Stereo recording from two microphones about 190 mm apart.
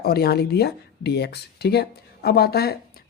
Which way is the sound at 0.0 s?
55° left (ahead or behind).